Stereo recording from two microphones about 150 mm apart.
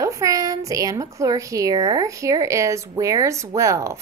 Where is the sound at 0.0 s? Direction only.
20° right (ahead or behind).